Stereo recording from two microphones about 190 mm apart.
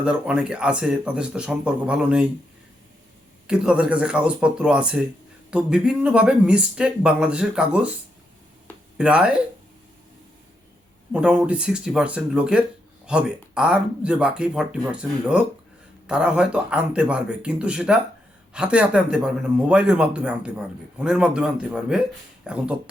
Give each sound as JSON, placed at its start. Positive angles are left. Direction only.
{"t": 0.0, "sound": "speech", "side_deg": -5}
{"t": 3.4, "sound": "speech", "side_deg": -5}
{"t": 9.0, "sound": "speech", "side_deg": -5}
{"t": 11.1, "sound": "speech", "side_deg": -5}